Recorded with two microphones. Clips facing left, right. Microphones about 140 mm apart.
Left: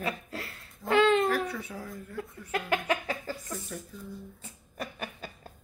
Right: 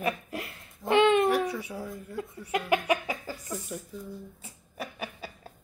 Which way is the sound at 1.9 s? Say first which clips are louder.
Right 2 dB; 15° right (ahead or behind).